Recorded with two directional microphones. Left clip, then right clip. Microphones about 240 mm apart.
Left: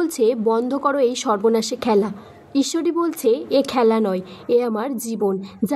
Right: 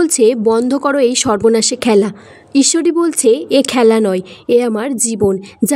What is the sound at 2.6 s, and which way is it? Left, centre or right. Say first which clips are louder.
Speech: right 8 dB; right.